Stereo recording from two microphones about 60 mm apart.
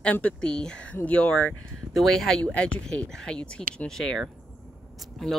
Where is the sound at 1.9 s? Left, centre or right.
Centre.